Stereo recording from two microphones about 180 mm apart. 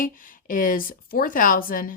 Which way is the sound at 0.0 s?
50° left (ahead or behind).